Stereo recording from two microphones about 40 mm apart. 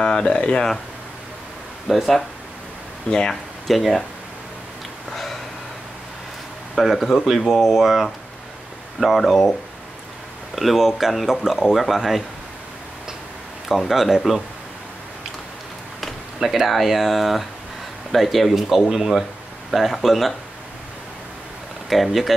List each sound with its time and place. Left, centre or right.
0.0 s speech: centre
1.9 s speech: centre
3.1 s speech: centre
3.6 s speech: centre
5.1 s a sound: centre
6.8 s speech: centre
10.5 s speech: centre
13.7 s speech: centre
16.0 s speech: centre
21.8 s speech: centre